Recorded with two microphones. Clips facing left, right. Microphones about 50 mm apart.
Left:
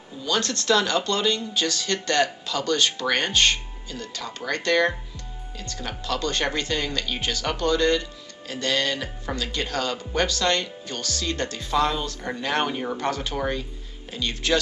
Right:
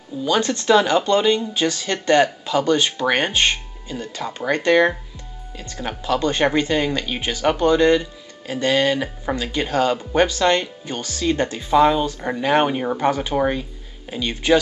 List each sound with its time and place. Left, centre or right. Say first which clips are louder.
0.2 s speech: right 6 dB; centre